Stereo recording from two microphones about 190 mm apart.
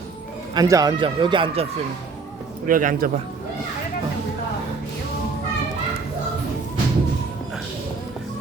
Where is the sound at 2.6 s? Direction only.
45° right (ahead or behind).